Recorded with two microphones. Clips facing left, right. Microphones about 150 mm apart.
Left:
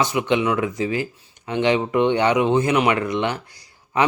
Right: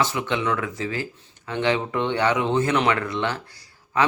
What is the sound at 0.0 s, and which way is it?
Speech, 15° left (ahead or behind).